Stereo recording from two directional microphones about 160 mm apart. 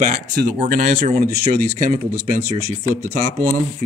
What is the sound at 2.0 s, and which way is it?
Speech, 75° right (ahead or behind).